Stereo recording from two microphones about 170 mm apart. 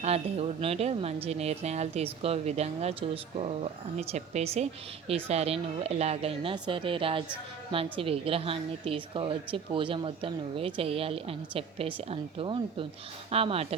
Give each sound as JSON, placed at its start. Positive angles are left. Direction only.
{"t": 0.0, "sound": "a woman's voice", "side_deg": -35}